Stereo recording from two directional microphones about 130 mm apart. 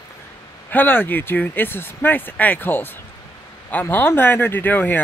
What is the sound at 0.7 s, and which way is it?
Speech, 15° left (ahead or behind).